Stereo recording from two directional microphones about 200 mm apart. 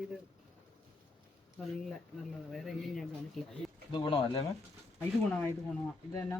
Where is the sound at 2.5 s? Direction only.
Centre (ahead or behind).